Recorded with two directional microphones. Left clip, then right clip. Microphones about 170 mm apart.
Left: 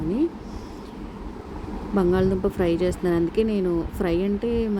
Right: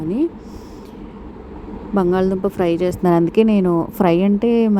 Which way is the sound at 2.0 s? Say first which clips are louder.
Right 4 dB; 30° right (ahead or behind).